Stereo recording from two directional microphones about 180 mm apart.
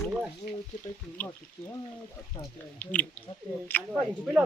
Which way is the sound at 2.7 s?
10° left (ahead or behind).